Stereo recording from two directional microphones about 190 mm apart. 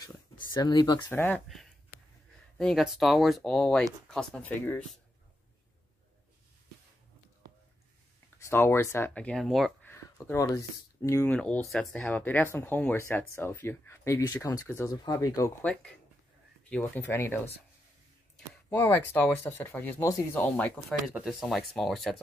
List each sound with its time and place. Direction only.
0.6 s speech: 20° left (ahead or behind)
1.2 s speech: 5° left (ahead or behind)
8.4 s speech: 15° left (ahead or behind)
9.8 s speech: 15° left (ahead or behind)
15.6 s speech: 5° left (ahead or behind)
18.5 s speech: 10° left (ahead or behind)
21.1 s speech: 5° right (ahead or behind)